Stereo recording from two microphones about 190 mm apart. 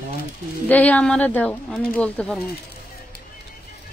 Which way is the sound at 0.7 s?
10° left (ahead or behind).